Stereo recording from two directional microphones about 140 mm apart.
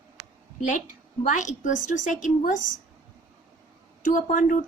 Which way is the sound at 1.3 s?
65° left (ahead or behind).